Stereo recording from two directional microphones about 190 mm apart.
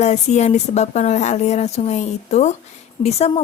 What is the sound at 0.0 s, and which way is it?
Speech, 35° left (ahead or behind).